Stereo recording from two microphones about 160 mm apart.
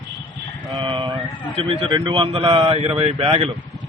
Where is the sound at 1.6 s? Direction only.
35° right (ahead or behind).